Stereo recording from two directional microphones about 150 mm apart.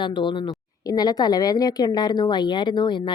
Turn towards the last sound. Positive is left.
turn(degrees=30)  # may be behind; listen again after turning